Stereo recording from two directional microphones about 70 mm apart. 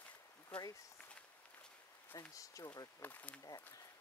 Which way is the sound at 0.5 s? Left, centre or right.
Centre.